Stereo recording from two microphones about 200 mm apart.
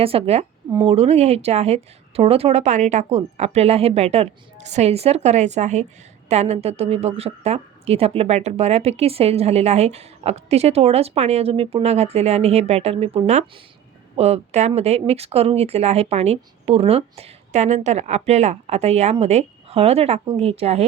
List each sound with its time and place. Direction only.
0.0 s a woman's voice: 30° right (ahead or behind)